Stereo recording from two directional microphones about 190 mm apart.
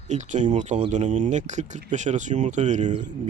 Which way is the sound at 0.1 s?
40° right (ahead or behind).